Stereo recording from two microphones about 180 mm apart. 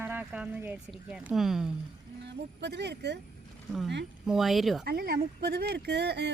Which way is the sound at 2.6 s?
70° right (ahead or behind).